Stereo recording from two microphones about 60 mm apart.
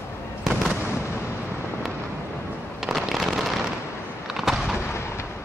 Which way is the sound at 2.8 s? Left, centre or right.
Centre.